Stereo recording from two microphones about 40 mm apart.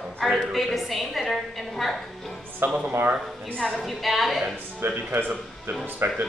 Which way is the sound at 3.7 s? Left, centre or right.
Centre.